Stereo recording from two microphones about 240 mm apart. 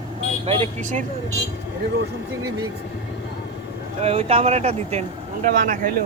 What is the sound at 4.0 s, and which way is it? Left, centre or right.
Speech, right.